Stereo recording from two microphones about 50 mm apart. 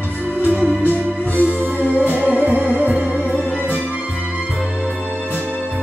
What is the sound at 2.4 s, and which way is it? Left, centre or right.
Music, right.